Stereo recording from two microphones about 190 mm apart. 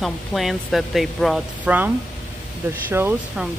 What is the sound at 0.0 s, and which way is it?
Speech, centre (ahead or behind).